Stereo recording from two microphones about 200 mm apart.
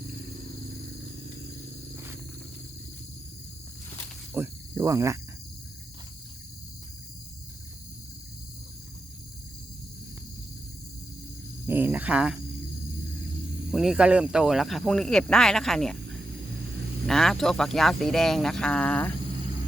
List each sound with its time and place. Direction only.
4.4 s cricket: 15° right (ahead or behind)
11.6 s speech: 10° right (ahead or behind)
13.7 s speech: 5° right (ahead or behind)
17.1 s speech: centre (ahead or behind)